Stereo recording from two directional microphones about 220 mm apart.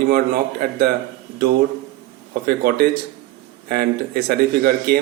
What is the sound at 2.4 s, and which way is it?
Speech, 45° right (ahead or behind).